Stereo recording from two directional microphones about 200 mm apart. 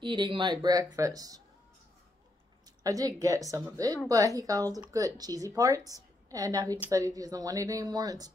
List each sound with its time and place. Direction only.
0.0 s speech: 25° right (ahead or behind)
2.8 s speech: 15° right (ahead or behind)